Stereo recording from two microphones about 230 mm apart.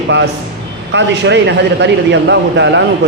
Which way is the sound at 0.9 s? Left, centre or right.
Right.